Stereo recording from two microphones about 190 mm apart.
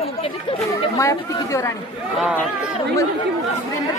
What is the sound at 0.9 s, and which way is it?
Speech, 15° left (ahead or behind).